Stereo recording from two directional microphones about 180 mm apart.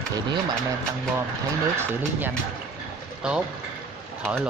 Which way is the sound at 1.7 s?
10° right (ahead or behind).